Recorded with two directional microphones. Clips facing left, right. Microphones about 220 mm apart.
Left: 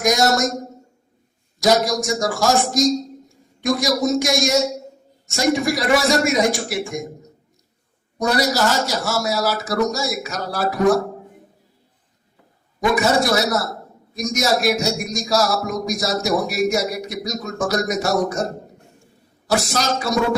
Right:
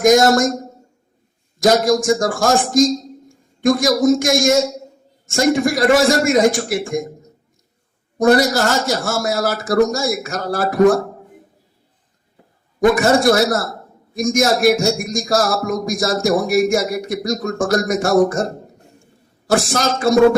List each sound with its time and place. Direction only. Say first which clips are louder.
0.0 s a man's voice: right 6 dB; 50° right (ahead or behind)
1.5 s a man's voice: right 4 dB; 50° right (ahead or behind)
8.2 s a man's voice: right 5 dB; 50° right (ahead or behind)
12.8 s a man's voice: right 5 dB; 50° right (ahead or behind)
19.5 s a man's voice: right 3 dB; 50° right (ahead or behind)